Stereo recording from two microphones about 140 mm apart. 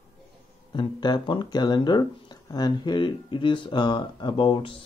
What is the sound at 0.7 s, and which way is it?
Speech, 35° left (ahead or behind).